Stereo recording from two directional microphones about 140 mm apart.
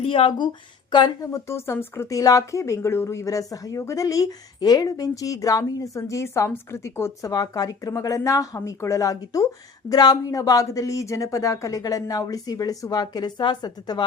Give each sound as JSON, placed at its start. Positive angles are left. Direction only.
{"t": 0.0, "sound": "a woman's voice", "side_deg": 40}